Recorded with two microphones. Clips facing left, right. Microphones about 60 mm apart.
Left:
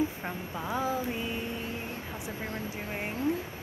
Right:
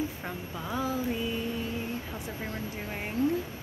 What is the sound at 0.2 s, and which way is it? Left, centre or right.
Vehicle, left.